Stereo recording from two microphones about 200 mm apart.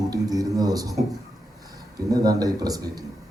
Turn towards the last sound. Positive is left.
turn(degrees=-20)  # may be behind; listen again after turning